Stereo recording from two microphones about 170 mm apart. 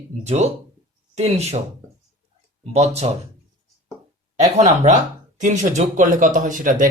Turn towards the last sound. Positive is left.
turn(degrees=-50)  # may be behind; listen again after turning